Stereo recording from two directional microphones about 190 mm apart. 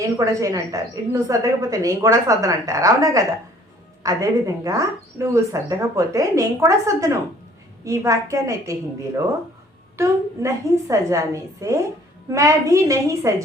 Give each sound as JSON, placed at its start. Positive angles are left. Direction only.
{"t": 0.0, "sound": "a woman's voice", "side_deg": -15}